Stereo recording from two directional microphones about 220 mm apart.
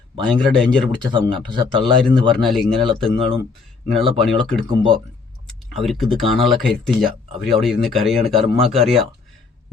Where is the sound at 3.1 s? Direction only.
25° right (ahead or behind).